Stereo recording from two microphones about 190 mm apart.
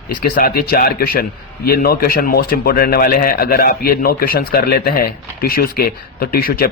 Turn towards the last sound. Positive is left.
turn(degrees=50)  # may be behind; listen again after turning